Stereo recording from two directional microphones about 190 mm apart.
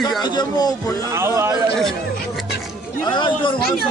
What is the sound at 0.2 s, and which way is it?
Speech, 20° left (ahead or behind).